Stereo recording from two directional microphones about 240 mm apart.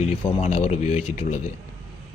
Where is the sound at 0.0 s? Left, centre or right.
Left.